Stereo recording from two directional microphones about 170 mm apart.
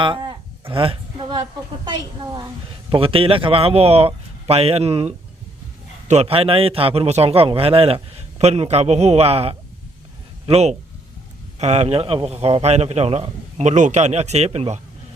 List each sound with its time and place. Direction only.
0.0 s a man's voice: 30° right (ahead or behind)